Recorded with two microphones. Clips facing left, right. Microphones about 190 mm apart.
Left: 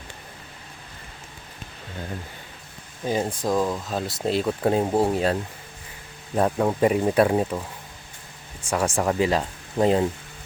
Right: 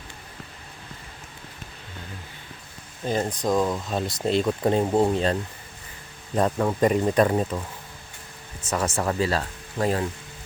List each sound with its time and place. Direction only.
3.0 s speech: 10° left (ahead or behind)
8.6 s speech: 10° left (ahead or behind)